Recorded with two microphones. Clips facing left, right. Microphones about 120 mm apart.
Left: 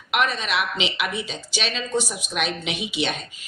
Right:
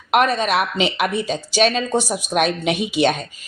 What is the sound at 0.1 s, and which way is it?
A woman's voice, 45° right (ahead or behind).